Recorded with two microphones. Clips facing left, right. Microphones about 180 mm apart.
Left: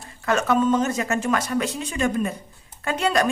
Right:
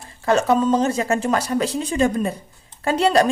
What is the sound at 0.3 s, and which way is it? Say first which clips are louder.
A woman's voice: right 3 dB; 30° right (ahead or behind).